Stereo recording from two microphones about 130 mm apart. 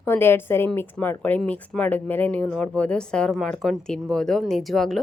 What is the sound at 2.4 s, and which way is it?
A woman's voice, centre (ahead or behind).